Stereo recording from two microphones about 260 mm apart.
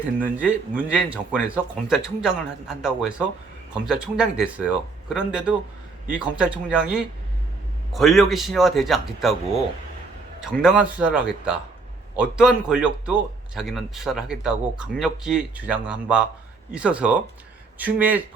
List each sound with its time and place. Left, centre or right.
0.2 s a man's voice: centre
10.4 s a man's voice: centre